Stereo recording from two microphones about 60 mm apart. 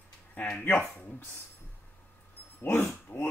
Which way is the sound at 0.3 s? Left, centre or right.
Left.